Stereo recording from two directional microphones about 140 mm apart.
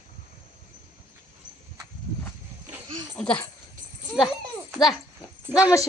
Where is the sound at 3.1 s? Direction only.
10° left (ahead or behind).